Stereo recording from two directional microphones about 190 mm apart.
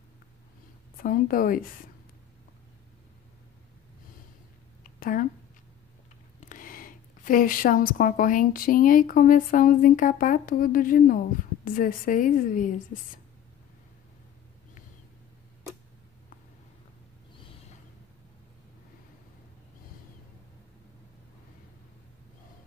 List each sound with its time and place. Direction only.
0.9 s speech: 45° left (ahead or behind)
6.4 s speech: 45° left (ahead or behind)